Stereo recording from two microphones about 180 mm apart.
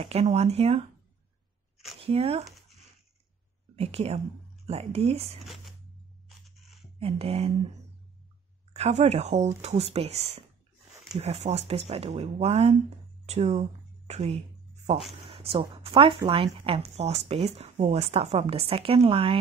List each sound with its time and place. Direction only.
0.0 s speech: 35° right (ahead or behind)
2.0 s speech: 35° right (ahead or behind)
3.7 s speech: 35° right (ahead or behind)
6.2 s a sound: centre (ahead or behind)
7.0 s speech: 35° right (ahead or behind)
8.7 s speech: 35° right (ahead or behind)